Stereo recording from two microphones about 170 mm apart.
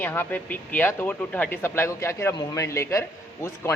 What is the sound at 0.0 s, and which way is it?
Speech, 10° left (ahead or behind).